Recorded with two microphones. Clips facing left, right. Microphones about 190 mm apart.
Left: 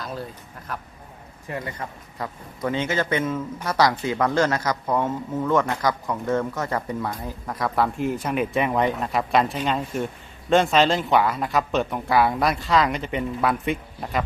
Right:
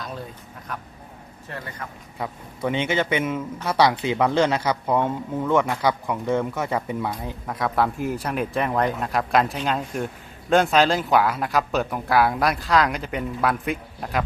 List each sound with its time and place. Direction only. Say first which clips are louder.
0.0 s a sound: left 2 dB; centre (ahead or behind)
0.7 s speech: left 1 dB; centre (ahead or behind)
1.5 s a man's voice: left 5 dB; 15° left (ahead or behind)
2.1 s speech: right 3 dB; 10° right (ahead or behind)
2.7 s speech: right 1 dB; 20° right (ahead or behind)
3.2 s speech: even; 10° right (ahead or behind)